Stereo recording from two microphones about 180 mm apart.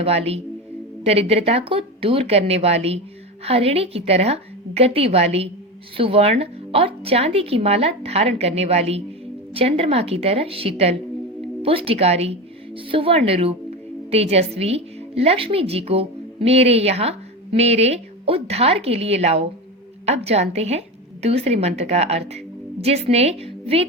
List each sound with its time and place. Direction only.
0.0 s a woman's voice: 35° right (ahead or behind)